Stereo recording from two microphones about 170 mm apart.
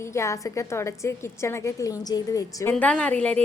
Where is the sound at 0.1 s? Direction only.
15° left (ahead or behind).